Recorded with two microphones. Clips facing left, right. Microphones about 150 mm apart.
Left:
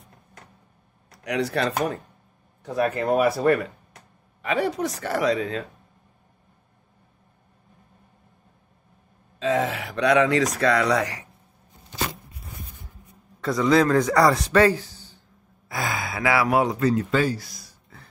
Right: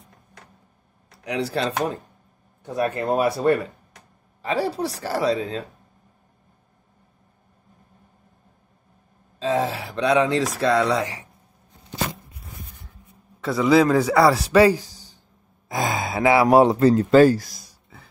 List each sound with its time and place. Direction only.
1.1 s speech: 30° right (ahead or behind)
2.6 s speech: 25° right (ahead or behind)
9.4 s speech: 35° right (ahead or behind)
13.4 s a man's voice: 5° right (ahead or behind); by 17.6 s 45° right (ahead or behind)